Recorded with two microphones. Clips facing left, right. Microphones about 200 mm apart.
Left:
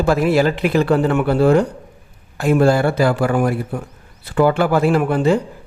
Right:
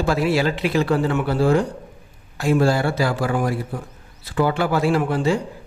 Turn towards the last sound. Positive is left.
turn(degrees=55)  # may be behind; listen again after turning